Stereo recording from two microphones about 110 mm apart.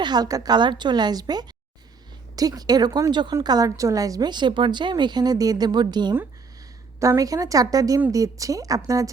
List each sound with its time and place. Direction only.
0.0 s a woman's voice: 40° right (ahead or behind)
7.0 s a woman's voice: 30° right (ahead or behind)